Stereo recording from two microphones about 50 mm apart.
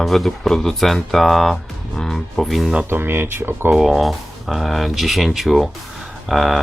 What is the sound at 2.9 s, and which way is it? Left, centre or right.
Speech, right.